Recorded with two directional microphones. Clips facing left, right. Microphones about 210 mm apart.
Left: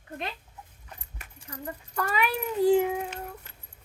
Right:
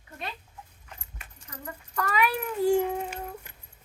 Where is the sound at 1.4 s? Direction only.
30° left (ahead or behind).